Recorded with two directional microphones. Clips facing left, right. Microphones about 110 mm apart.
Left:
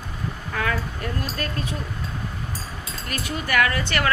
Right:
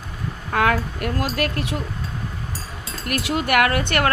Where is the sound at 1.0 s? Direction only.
85° right.